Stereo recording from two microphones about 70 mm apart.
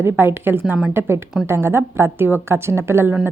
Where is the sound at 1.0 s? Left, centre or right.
Right.